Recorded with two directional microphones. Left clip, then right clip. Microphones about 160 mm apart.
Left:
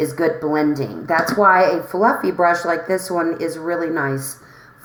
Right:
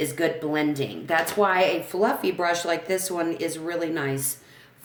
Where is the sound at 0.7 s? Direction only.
30° right (ahead or behind).